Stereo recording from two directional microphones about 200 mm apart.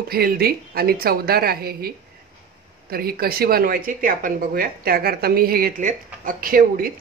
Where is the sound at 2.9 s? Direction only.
50° right (ahead or behind).